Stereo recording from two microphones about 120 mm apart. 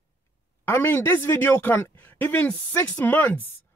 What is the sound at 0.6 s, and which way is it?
Speech, 20° left (ahead or behind).